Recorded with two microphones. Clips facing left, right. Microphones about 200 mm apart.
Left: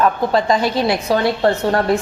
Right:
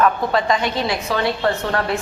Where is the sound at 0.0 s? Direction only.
30° left (ahead or behind).